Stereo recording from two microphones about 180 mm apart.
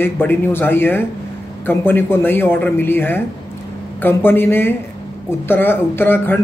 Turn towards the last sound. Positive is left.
turn(degrees=10)  # may be behind; listen again after turning